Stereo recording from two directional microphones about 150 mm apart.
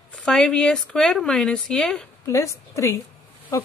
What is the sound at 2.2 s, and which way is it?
Speech, 20° left (ahead or behind).